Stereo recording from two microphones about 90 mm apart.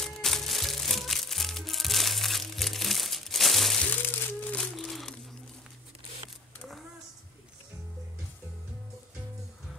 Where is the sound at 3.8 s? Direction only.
20° left (ahead or behind).